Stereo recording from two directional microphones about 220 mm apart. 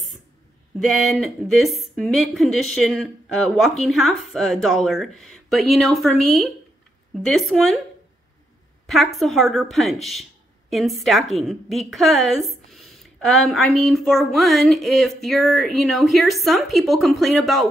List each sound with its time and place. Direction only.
0.7 s a woman's voice: centre (ahead or behind)
8.8 s a woman's voice: centre (ahead or behind)